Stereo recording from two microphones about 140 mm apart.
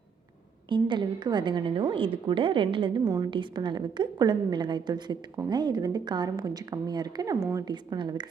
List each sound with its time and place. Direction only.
0.7 s a woman's voice: 35° right (ahead or behind)